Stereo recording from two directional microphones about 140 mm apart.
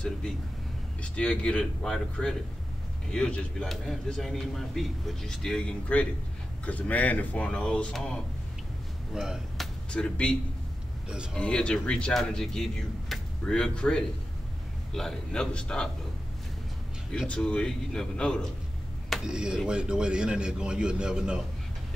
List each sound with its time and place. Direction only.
1.1 s speech: 5° left (ahead or behind)
9.8 s speech: 5° left (ahead or behind)
11.3 s speech: 5° left (ahead or behind)
17.1 s a man's voice: 5° left (ahead or behind)